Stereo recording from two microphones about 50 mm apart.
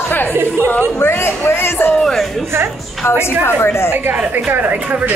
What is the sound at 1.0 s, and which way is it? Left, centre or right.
Speech, left.